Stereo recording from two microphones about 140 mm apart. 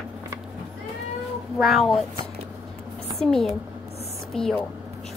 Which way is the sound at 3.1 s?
Centre (ahead or behind).